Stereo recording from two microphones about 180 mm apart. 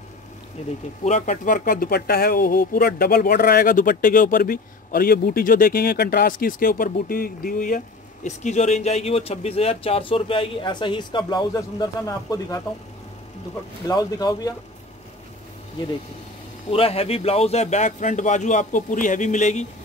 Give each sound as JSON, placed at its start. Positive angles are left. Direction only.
{"t": 1.0, "sound": "speech", "side_deg": 45}
{"t": 13.8, "sound": "speech", "side_deg": 20}
{"t": 16.7, "sound": "speech", "side_deg": 35}